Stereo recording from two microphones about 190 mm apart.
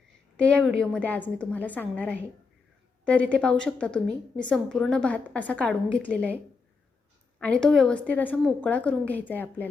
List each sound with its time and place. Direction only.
0.3 s a woman's voice: 5° left (ahead or behind)